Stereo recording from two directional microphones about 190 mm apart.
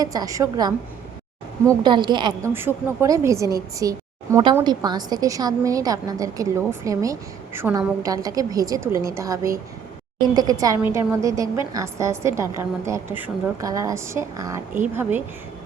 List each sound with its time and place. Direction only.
0.0 s a woman's voice: 20° right (ahead or behind)
2.5 s a woman's voice: 10° right (ahead or behind)